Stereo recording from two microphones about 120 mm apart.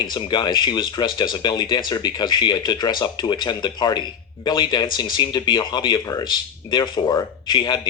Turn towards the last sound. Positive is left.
turn(degrees=40)  # may be behind; listen again after turning